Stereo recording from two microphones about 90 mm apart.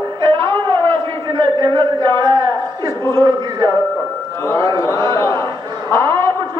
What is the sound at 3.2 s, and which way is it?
Speech, 55° right (ahead or behind).